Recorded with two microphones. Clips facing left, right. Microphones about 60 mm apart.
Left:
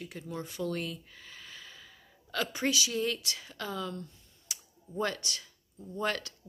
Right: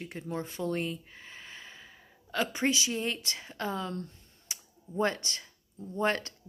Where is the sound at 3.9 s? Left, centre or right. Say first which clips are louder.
Right 4 dB; right.